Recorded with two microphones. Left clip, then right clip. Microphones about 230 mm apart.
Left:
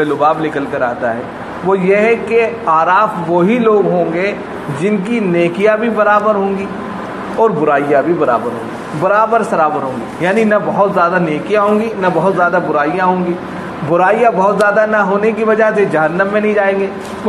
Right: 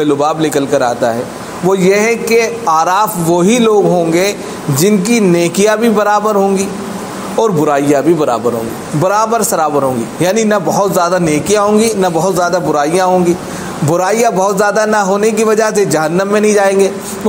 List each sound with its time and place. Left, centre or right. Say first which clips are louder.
0.2 s a man's voice: right 1 dB; right
7.4 s a man's voice: even; right